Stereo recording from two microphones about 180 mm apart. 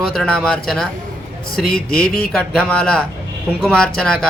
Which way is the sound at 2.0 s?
55° left (ahead or behind).